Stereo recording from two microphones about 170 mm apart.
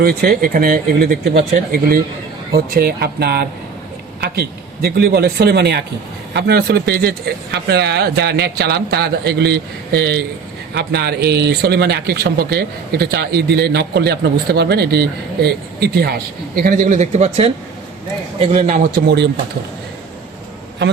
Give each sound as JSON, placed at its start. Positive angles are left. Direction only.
{"t": 0.0, "sound": "speech", "side_deg": -65}
{"t": 19.0, "sound": "speech", "side_deg": -80}